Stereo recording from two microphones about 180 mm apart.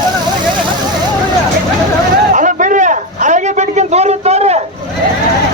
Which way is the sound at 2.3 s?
45° right (ahead or behind).